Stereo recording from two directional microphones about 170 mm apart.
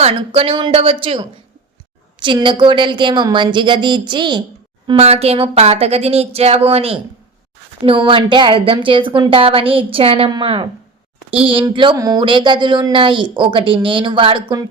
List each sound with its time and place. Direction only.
0.0 s a woman's voice: 35° right (ahead or behind)
4.9 s a woman's voice: 40° right (ahead or behind)